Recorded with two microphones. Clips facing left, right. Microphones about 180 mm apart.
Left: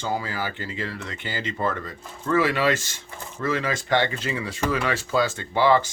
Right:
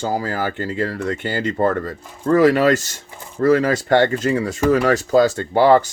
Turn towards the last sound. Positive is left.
turn(degrees=-45)  # may be behind; listen again after turning